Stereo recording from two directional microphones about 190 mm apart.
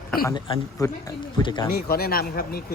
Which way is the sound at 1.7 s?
50° left (ahead or behind).